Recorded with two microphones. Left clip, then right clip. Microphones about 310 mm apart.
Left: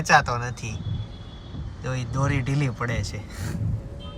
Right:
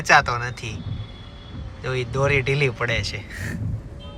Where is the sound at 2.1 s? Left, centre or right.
Centre.